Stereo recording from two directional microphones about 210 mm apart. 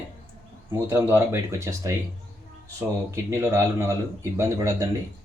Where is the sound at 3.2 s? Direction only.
15° right (ahead or behind).